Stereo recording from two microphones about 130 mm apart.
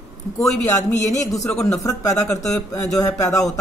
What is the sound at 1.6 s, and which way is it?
A woman's voice, 25° left (ahead or behind).